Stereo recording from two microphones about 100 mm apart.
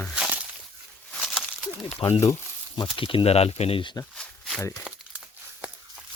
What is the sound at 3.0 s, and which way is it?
Speech, 65° left (ahead or behind).